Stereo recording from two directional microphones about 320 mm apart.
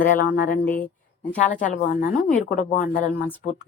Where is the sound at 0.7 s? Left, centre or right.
Centre.